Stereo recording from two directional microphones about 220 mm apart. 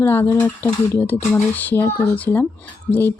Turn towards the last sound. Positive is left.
turn(degrees=10)  # may be behind; listen again after turning